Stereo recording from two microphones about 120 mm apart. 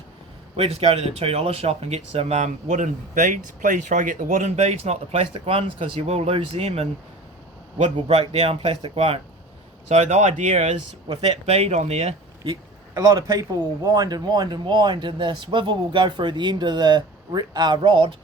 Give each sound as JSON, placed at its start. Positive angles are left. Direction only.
{"t": 0.5, "sound": "speech", "side_deg": -55}
{"t": 7.9, "sound": "speech", "side_deg": -55}
{"t": 9.9, "sound": "speech", "side_deg": -65}
{"t": 11.1, "sound": "speech", "side_deg": -55}
{"t": 12.5, "sound": "speech", "side_deg": -35}